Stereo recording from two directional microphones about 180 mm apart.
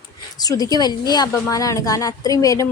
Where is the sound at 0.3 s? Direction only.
20° left (ahead or behind).